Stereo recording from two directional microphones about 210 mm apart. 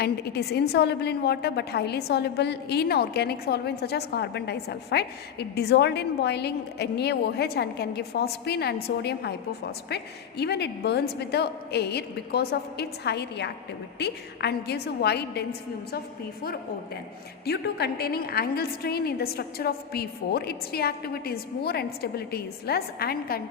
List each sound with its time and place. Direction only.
0.0 s a woman's voice: 50° left (ahead or behind)
17.4 s a woman's voice: 50° left (ahead or behind)